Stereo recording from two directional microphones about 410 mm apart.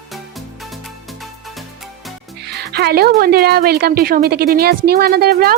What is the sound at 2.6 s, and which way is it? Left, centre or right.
A woman's voice, right.